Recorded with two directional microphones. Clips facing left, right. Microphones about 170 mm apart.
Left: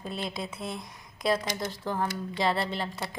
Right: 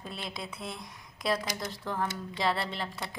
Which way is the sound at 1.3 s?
25° left (ahead or behind).